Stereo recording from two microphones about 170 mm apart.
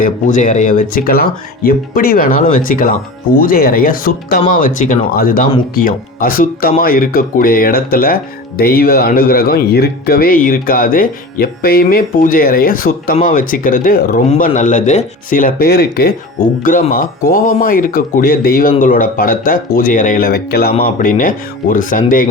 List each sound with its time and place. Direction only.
0.0 s speech: 50° left (ahead or behind)
16.6 s speech: 55° left (ahead or behind)
20.8 s speech: 55° left (ahead or behind)